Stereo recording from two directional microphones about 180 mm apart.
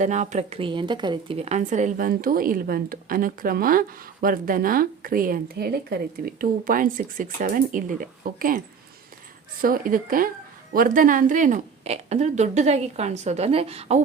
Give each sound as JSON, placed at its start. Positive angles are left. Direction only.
{"t": 0.0, "sound": "a woman's voice", "side_deg": -40}